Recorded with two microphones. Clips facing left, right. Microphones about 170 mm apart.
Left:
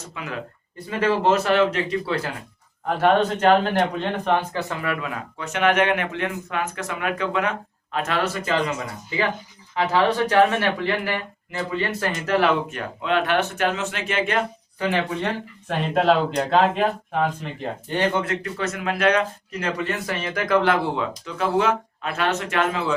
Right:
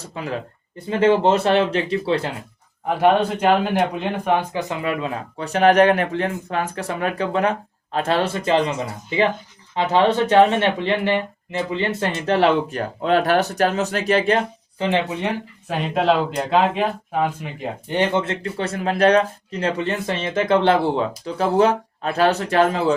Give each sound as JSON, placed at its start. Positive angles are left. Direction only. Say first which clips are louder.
{"t": 0.0, "sound": "speech", "louder": "right 4 dB", "side_deg": -35}
{"t": 2.8, "sound": "speech", "louder": "right 2 dB", "side_deg": -10}
{"t": 15.7, "sound": "speech", "louder": "even", "side_deg": 0}